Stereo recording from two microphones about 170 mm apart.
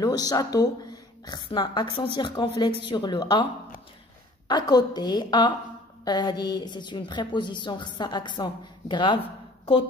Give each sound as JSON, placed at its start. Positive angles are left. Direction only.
{"t": 0.0, "sound": "a woman's voice", "side_deg": 20}
{"t": 4.5, "sound": "a woman's voice", "side_deg": 25}